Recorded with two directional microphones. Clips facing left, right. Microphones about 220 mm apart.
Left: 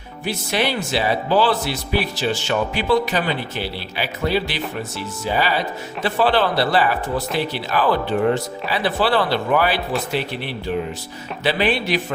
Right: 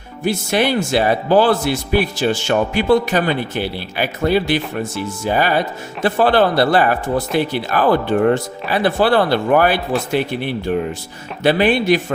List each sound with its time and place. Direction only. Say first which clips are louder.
0.3 s speech: right 5 dB; 50° right (ahead or behind)